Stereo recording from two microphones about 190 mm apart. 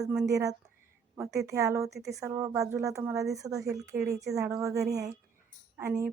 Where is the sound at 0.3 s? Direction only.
15° right (ahead or behind).